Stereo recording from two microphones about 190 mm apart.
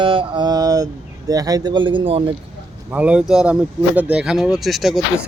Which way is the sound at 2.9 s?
5° right (ahead or behind).